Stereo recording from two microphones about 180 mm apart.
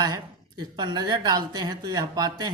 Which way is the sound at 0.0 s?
20° right (ahead or behind).